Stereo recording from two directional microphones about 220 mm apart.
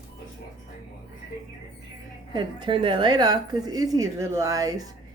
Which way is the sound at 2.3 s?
20° right (ahead or behind).